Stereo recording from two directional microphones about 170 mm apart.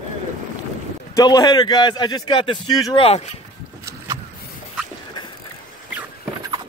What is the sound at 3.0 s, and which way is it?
Speech, 40° left (ahead or behind).